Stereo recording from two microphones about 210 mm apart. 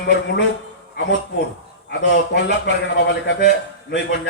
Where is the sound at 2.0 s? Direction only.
60° left (ahead or behind).